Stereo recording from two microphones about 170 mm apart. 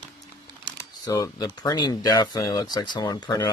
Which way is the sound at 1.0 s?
20° left (ahead or behind).